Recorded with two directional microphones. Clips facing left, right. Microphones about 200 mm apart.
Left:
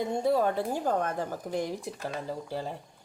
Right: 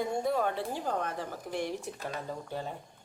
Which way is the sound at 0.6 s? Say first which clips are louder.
Left 5 dB; 50° left (ahead or behind).